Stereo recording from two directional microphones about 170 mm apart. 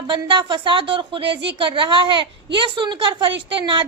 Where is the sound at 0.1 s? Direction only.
25° right (ahead or behind).